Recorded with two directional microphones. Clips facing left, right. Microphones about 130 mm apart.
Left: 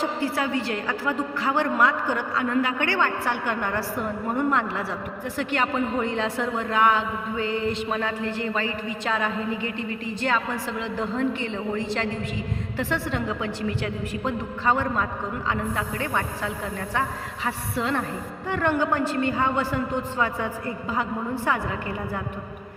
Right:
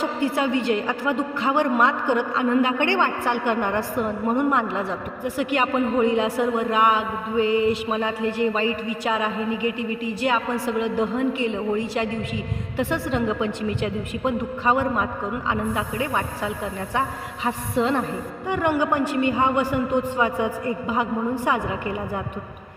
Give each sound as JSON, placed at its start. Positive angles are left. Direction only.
{"t": 0.0, "sound": "a woman's voice", "side_deg": -20}